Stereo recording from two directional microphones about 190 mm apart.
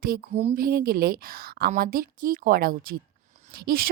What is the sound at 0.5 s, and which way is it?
A woman's voice, 50° right (ahead or behind).